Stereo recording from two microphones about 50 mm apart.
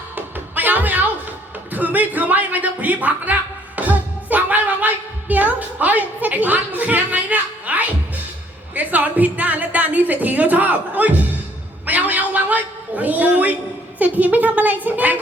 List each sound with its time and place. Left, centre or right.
0.2 s music: right
1.7 s a woman's voice: right
3.8 s music: right
5.3 s a woman's voice: right
11.9 s a sound: right
14.0 s a woman's voice: right